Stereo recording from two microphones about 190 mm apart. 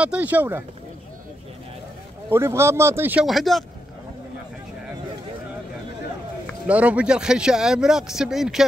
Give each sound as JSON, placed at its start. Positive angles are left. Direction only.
{"t": 0.0, "sound": "speech", "side_deg": -5}
{"t": 2.2, "sound": "speech", "side_deg": -15}
{"t": 6.7, "sound": "speech", "side_deg": -5}